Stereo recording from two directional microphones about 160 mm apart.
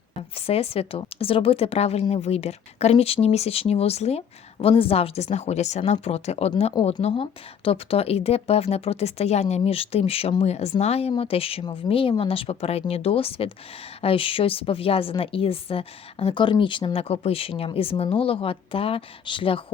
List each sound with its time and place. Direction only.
0.2 s a woman's voice: 40° left (ahead or behind)